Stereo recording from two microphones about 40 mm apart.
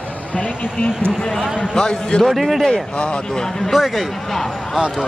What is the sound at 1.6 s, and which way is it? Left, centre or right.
Speech, left.